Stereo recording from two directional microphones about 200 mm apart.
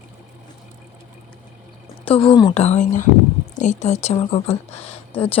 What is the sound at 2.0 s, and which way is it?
Speech, 25° left (ahead or behind).